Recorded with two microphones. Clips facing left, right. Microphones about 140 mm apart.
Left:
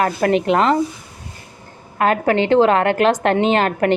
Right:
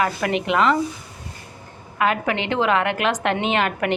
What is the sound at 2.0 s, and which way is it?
Speech, 40° left (ahead or behind).